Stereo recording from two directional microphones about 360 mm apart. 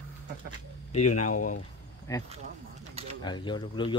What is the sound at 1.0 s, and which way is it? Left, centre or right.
Speech, left.